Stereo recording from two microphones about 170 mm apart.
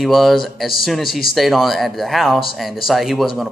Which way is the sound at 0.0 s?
Centre (ahead or behind).